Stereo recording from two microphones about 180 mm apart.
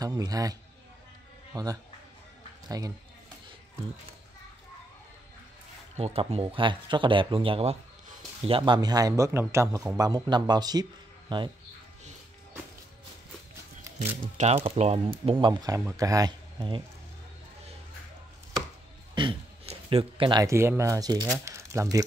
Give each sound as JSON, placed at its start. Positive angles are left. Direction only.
{"t": 0.0, "sound": "speech", "side_deg": -20}
{"t": 5.9, "sound": "speech", "side_deg": -35}
{"t": 13.9, "sound": "speech", "side_deg": -40}
{"t": 15.4, "sound": "speech", "side_deg": -20}
{"t": 19.1, "sound": "speech", "side_deg": -30}